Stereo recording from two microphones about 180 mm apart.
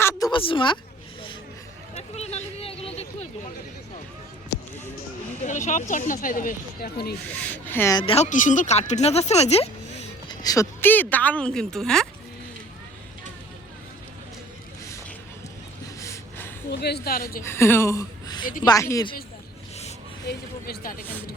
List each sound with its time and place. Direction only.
0.0 s a sound: 15° left (ahead or behind)
0.3 s a woman's voice: 30° left (ahead or behind)
2.0 s a sound: 35° left (ahead or behind)
5.5 s speech: 45° left (ahead or behind); by 7.2 s 60° left (ahead or behind)
7.5 s a woman's voice: 10° left (ahead or behind)
7.9 s speech: 30° left (ahead or behind)
10.2 s a woman's voice: 20° left (ahead or behind); by 12.0 s 5° left (ahead or behind)
16.0 s a sound: 15° left (ahead or behind)
16.8 s speech: 60° left (ahead or behind)
17.4 s a woman's voice: 15° left (ahead or behind)
20.2 s speech: 55° left (ahead or behind)